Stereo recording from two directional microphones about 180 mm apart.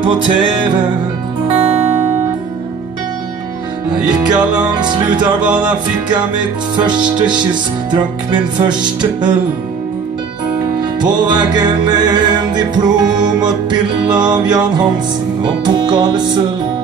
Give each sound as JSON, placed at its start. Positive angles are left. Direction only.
{"t": 0.0, "sound": "music", "side_deg": -25}
{"t": 3.9, "sound": "music", "side_deg": -5}
{"t": 4.7, "sound": "music", "side_deg": -25}
{"t": 5.4, "sound": "music", "side_deg": -5}
{"t": 6.8, "sound": "music", "side_deg": -25}
{"t": 10.8, "sound": "music", "side_deg": -25}